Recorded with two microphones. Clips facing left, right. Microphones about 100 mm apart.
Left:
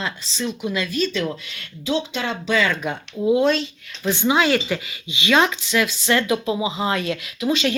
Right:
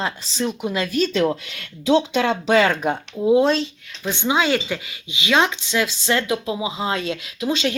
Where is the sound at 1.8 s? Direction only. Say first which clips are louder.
Right 6 dB; 65° right (ahead or behind); by 2.9 s 45° right (ahead or behind).